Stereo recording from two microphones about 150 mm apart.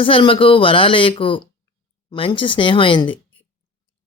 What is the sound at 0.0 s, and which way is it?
Speech, 35° left (ahead or behind).